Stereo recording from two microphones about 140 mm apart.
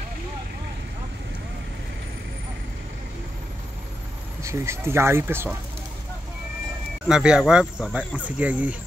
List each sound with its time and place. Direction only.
4.4 s speech: 20° right (ahead or behind)
7.1 s speech: 5° right (ahead or behind)